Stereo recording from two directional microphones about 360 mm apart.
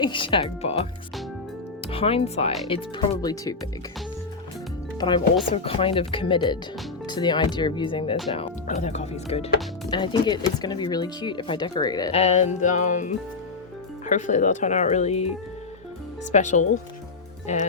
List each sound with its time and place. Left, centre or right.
0.0 s speech: centre
1.9 s speech: centre
4.9 s speech: centre
16.3 s speech: centre
17.4 s music: centre